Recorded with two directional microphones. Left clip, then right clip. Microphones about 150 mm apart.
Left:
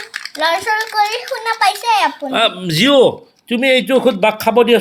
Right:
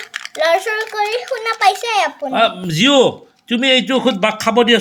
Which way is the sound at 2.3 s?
5° left (ahead or behind).